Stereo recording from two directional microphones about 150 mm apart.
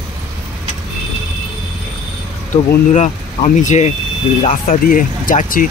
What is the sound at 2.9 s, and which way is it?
Speech, 55° left (ahead or behind).